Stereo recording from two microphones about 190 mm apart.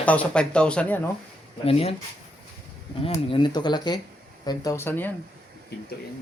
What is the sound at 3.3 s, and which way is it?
Speech, 25° left (ahead or behind).